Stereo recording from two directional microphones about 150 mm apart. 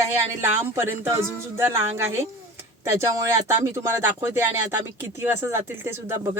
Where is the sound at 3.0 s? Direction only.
20° right (ahead or behind).